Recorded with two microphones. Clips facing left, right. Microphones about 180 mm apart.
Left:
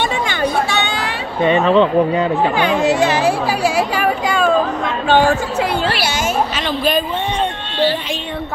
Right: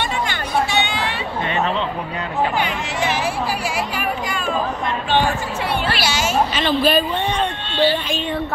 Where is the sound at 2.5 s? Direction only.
75° left (ahead or behind); by 5.8 s 90° left.